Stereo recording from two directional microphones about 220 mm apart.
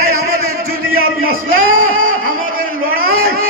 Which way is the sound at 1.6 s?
65° right (ahead or behind).